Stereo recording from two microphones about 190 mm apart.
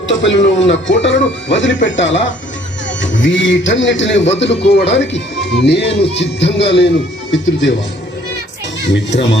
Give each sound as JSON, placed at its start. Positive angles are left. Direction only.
{"t": 0.1, "sound": "a man's voice", "side_deg": 75}
{"t": 8.9, "sound": "a man's voice", "side_deg": 70}